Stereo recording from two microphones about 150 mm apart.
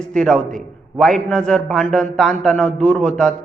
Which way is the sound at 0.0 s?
5° left (ahead or behind).